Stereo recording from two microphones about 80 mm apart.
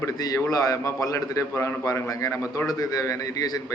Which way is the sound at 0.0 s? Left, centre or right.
Left.